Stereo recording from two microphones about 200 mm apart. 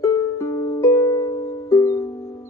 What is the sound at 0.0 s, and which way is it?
Music, 15° left (ahead or behind).